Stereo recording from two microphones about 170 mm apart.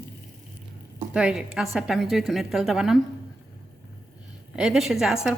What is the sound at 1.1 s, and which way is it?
A woman's voice, 5° right (ahead or behind).